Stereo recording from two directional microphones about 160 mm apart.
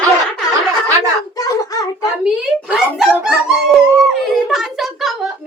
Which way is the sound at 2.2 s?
5° right (ahead or behind).